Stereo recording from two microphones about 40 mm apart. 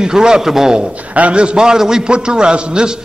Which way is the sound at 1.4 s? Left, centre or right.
Right.